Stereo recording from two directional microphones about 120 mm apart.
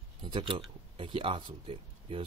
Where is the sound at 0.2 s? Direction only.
45° right (ahead or behind).